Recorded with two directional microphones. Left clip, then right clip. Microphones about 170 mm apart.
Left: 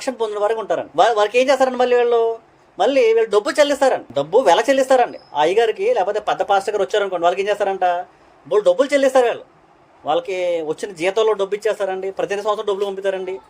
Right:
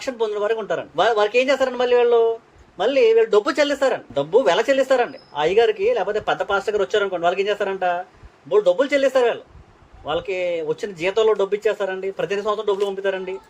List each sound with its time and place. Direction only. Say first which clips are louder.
0.0 s speech: left 2 dB; 45° left (ahead or behind)